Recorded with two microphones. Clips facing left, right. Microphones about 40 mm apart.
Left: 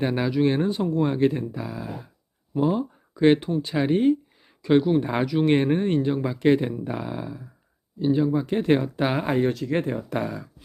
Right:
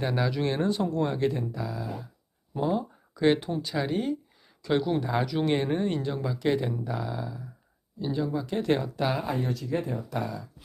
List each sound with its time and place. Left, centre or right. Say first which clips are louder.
0.0 s speech: left 5 dB; left
2.7 s a sound: left 3 dB; left
3.6 s speech: left 7 dB; left
4.9 s speech: left 4 dB; left
5.2 s speech: left 5 dB; centre
5.5 s speech: left 5 dB; left
9.0 s speech: left 6 dB; left